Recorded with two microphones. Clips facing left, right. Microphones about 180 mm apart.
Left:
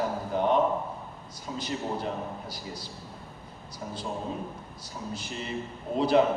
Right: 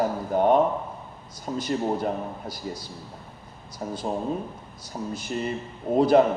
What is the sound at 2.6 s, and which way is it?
Mantra, 50° right (ahead or behind).